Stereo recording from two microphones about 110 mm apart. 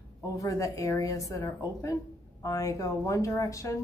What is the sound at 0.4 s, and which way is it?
Speech, 30° left (ahead or behind).